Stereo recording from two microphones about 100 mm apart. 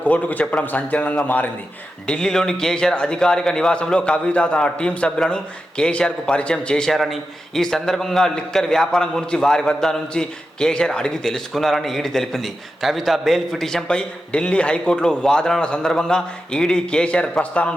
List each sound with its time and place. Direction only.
0.0 s a man's voice: 15° left (ahead or behind)